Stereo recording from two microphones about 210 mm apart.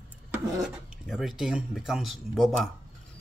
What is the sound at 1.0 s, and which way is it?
Speech, centre (ahead or behind).